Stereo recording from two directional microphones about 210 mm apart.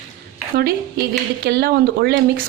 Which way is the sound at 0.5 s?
45° right (ahead or behind).